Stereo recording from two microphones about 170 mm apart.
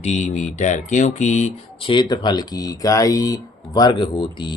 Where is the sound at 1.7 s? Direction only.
30° left (ahead or behind).